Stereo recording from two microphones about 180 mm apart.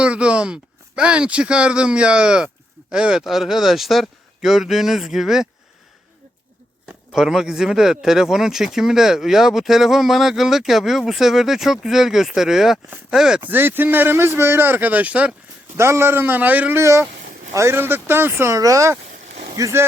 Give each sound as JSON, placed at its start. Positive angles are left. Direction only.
{"t": 0.0, "sound": "speech", "side_deg": -5}
{"t": 7.1, "sound": "speech", "side_deg": 0}